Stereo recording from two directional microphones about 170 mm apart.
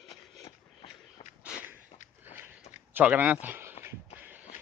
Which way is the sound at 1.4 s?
10° right (ahead or behind).